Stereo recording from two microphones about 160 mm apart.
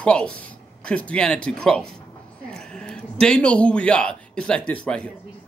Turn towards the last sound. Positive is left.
turn(degrees=5)  # may be behind; listen again after turning